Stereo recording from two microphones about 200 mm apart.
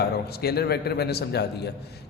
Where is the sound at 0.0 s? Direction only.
50° left (ahead or behind).